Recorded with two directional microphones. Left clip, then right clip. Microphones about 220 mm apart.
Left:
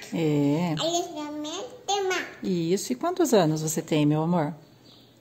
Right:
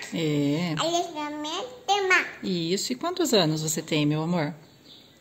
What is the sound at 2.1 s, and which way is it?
A woman's voice, 10° left (ahead or behind).